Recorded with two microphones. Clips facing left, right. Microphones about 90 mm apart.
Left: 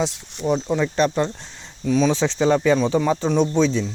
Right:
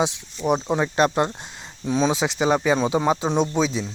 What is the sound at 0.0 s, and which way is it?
Speech, 15° right (ahead or behind).